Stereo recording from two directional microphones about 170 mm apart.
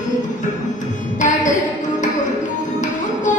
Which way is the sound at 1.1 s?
45° left (ahead or behind).